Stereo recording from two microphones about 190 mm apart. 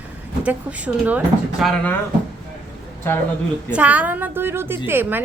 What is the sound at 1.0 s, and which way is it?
Speech, 5° right (ahead or behind).